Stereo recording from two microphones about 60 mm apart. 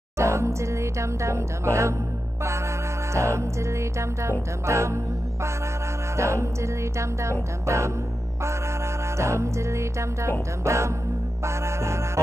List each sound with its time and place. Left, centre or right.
0.2 s music: right
3.1 s music: right
9.1 s music: right